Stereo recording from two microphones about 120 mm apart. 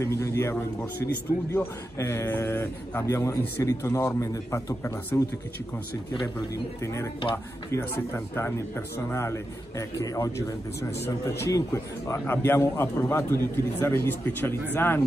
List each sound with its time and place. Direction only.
0.0 s a man's voice: 25° left (ahead or behind)
6.8 s a man's voice: 25° left (ahead or behind)